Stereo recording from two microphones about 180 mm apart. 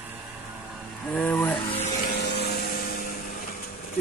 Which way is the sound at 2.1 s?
65° left (ahead or behind).